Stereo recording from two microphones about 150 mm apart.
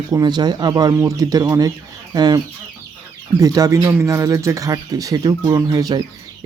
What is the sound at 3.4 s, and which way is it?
Speech, 20° right (ahead or behind).